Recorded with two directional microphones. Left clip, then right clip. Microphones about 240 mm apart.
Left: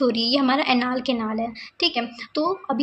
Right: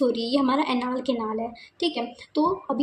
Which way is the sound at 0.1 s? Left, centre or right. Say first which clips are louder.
Left 3 dB; centre.